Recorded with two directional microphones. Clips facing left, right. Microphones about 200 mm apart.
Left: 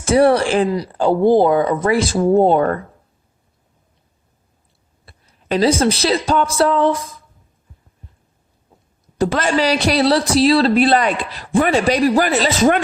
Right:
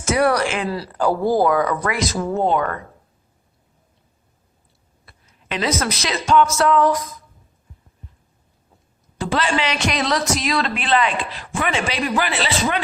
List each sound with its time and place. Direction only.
0.0 s speech: 30° left (ahead or behind)
0.7 s speech: 20° left (ahead or behind)
5.0 s a woman's voice: 35° left (ahead or behind)
9.1 s speech: 40° left (ahead or behind)